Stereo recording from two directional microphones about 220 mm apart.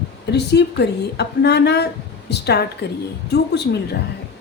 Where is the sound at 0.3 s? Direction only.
50° left (ahead or behind).